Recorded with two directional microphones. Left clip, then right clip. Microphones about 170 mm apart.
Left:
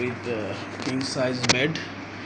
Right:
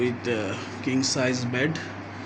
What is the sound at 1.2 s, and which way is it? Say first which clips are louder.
Speech: left 3 dB; 35° right (ahead or behind).